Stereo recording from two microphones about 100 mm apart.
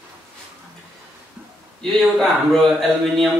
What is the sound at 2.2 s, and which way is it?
Speech, 5° left (ahead or behind).